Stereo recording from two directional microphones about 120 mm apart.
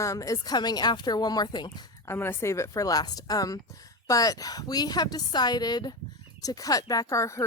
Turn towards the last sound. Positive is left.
turn(degrees=25)  # may be behind; listen again after turning